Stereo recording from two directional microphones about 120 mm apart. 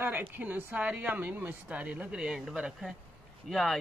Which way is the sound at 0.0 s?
15° right (ahead or behind).